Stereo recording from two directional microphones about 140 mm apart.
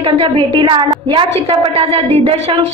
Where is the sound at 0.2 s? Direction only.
35° right (ahead or behind).